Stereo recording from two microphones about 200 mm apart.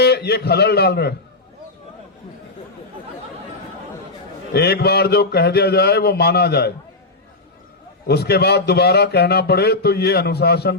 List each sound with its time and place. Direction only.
0.0 s a man's voice: 55° left (ahead or behind)
4.5 s a man's voice: 55° left (ahead or behind)
8.0 s a man's voice: 55° left (ahead or behind)